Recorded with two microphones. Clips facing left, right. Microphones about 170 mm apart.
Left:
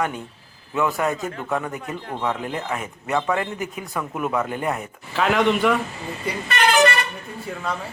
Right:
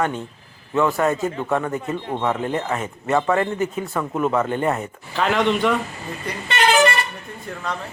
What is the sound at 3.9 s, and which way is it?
Speech, 30° right (ahead or behind).